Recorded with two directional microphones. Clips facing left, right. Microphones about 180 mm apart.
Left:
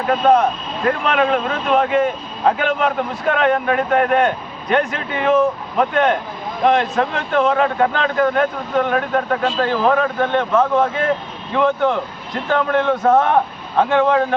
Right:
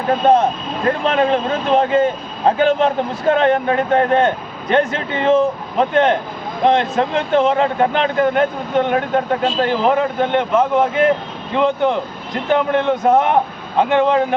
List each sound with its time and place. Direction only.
0.9 s speech: 30° right (ahead or behind)